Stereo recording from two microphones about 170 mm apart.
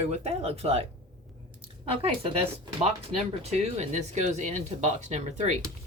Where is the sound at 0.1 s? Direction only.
35° right (ahead or behind).